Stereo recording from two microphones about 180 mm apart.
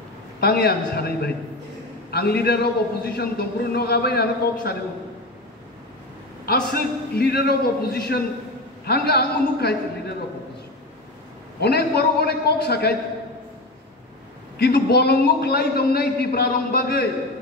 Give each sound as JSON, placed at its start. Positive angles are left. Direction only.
{"t": 0.4, "sound": "a man's voice", "side_deg": 60}
{"t": 6.7, "sound": "a man's voice", "side_deg": 60}
{"t": 11.6, "sound": "a man's voice", "side_deg": 60}
{"t": 14.6, "sound": "a man's voice", "side_deg": 60}